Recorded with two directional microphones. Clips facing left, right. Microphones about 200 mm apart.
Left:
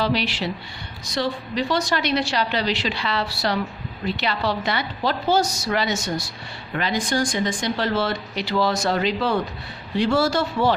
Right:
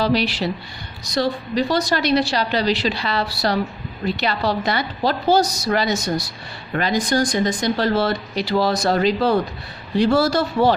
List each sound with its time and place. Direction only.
0.0 s speech: 40° right (ahead or behind)